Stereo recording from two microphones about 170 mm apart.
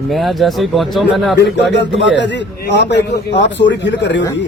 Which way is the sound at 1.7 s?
90° left.